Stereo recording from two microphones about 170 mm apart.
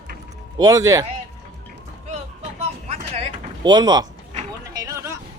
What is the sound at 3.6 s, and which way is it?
Speech, 25° right (ahead or behind).